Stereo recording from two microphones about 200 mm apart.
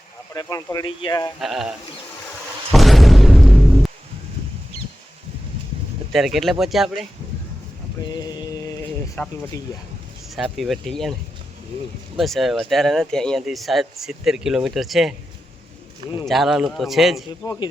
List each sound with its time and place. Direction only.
0.3 s speech: 15° left (ahead or behind)
1.4 s speech: centre (ahead or behind)
2.7 s a sound: centre (ahead or behind)
6.1 s speech: centre (ahead or behind)
8.0 s a sound: 20° left (ahead or behind)
10.2 s speech: centre (ahead or behind)
12.1 s speech: centre (ahead or behind)
16.2 s speech: centre (ahead or behind)
17.4 s speech: 15° left (ahead or behind)